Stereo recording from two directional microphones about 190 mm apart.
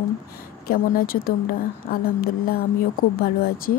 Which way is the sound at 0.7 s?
50° left (ahead or behind).